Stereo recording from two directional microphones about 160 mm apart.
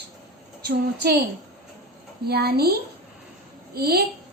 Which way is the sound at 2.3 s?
85° right.